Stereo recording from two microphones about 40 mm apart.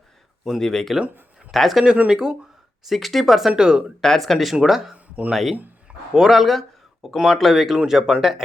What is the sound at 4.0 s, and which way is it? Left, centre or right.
Speech, centre.